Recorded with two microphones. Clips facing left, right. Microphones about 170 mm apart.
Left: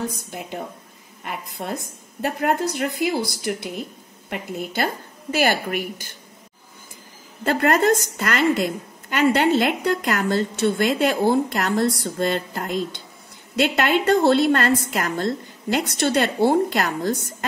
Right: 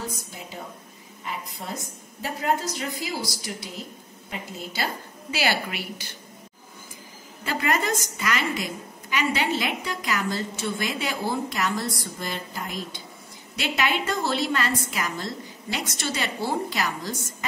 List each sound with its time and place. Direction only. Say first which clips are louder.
1.2 s a woman's voice: left 4 dB; 60° left (ahead or behind)
7.4 s a woman's voice: left 8 dB; 60° left (ahead or behind)